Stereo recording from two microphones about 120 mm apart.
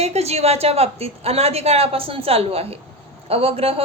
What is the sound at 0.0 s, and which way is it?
Speech, 60° right (ahead or behind).